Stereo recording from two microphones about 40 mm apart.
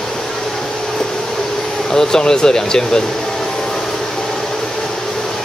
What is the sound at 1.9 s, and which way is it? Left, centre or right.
Speech, centre.